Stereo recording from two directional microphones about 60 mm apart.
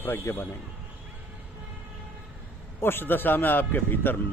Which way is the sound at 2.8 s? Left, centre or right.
Left.